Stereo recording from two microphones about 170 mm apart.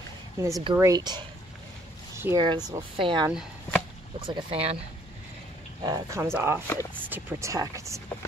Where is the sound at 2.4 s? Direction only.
25° right (ahead or behind).